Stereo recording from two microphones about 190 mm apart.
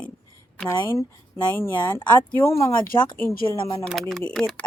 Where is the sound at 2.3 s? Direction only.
10° left (ahead or behind).